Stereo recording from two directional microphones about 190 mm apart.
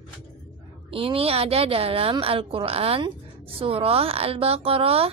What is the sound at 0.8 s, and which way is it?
A woman's voice, 30° right (ahead or behind).